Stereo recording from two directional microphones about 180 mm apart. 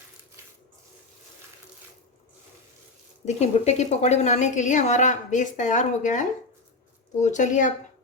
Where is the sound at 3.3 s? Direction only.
40° left (ahead or behind).